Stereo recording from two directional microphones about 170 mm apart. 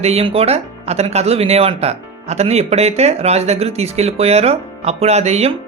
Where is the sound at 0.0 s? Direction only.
35° right (ahead or behind).